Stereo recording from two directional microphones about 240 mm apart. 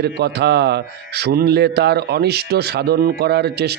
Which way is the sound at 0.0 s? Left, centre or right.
Right.